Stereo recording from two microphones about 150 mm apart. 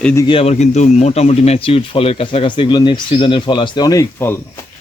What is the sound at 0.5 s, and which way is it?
Speech, 50° left (ahead or behind).